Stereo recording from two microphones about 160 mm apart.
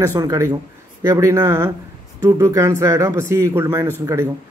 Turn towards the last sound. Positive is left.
turn(degrees=-15)  # may be behind; listen again after turning